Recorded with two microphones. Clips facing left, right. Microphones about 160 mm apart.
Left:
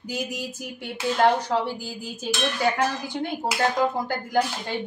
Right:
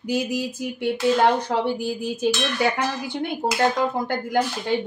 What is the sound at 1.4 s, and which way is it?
Dishes, 65° right (ahead or behind).